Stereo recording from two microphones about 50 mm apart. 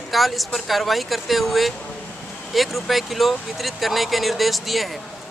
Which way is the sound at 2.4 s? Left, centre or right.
Centre.